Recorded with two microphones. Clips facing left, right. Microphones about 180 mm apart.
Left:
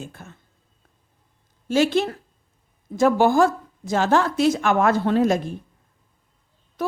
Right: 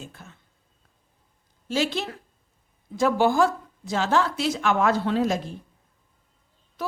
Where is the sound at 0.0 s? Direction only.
50° left (ahead or behind).